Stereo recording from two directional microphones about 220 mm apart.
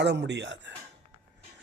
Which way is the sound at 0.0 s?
55° right (ahead or behind).